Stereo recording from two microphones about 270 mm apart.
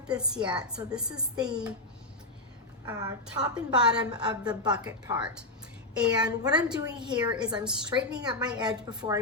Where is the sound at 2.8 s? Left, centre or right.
Centre.